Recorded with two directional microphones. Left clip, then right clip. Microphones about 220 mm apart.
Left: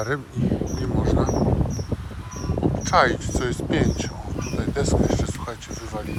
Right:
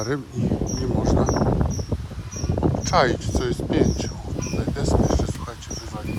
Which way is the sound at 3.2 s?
20° right (ahead or behind).